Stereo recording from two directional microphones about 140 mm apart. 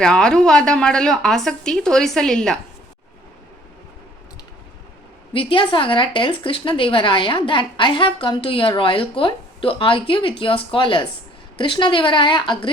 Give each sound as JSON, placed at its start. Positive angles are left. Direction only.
{"t": 0.0, "sound": "a woman's voice", "side_deg": 5}
{"t": 5.3, "sound": "a woman's voice", "side_deg": 40}